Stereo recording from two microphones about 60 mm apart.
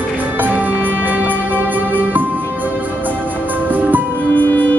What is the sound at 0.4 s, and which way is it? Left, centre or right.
Music, right.